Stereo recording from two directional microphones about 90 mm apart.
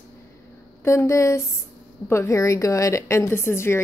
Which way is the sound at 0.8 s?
35° left (ahead or behind).